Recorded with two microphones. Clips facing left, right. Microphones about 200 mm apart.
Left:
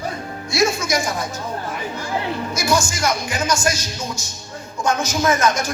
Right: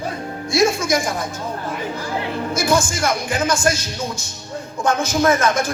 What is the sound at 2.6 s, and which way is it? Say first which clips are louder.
A man's voice: right 2 dB; 55° right (ahead or behind).